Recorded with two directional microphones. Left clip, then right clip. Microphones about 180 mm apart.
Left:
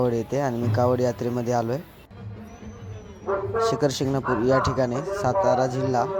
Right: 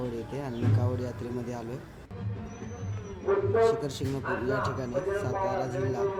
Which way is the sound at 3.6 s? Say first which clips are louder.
Left 3 dB; 40° left (ahead or behind).